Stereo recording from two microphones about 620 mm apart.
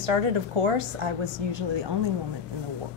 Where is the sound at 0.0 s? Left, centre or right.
Right.